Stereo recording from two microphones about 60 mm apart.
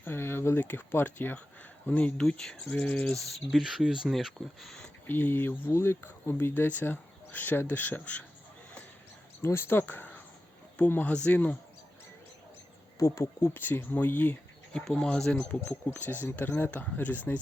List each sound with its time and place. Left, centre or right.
0.0 s speech: left
1.9 s speech: left
2.3 s speech: centre
2.8 s speech: left
3.2 s speech: centre
4.1 s speech: centre
5.0 s speech: left
5.7 s speech: left
9.4 s speech: left
13.0 s speech: left
13.5 s speech: left
14.7 s speech: centre
16.0 s speech: left